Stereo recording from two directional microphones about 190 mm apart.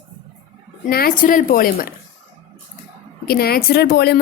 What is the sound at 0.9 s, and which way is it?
A woman's voice, 50° left (ahead or behind).